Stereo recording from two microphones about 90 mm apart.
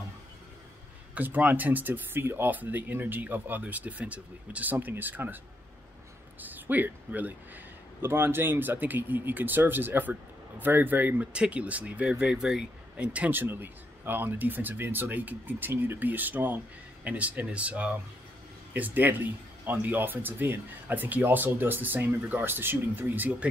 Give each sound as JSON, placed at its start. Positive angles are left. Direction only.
{"t": 1.1, "sound": "speech", "side_deg": -20}
{"t": 6.4, "sound": "speech", "side_deg": -20}